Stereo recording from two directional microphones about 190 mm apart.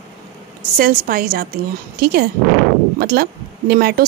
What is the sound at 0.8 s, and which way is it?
A woman's voice, 50° right (ahead or behind).